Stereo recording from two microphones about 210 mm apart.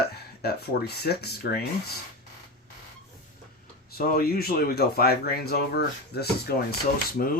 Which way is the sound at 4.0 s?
45° left (ahead or behind).